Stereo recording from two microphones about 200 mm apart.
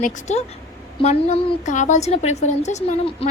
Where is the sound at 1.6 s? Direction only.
35° left (ahead or behind).